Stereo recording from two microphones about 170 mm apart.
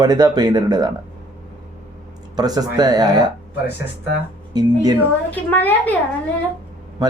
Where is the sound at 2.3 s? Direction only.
20° right (ahead or behind).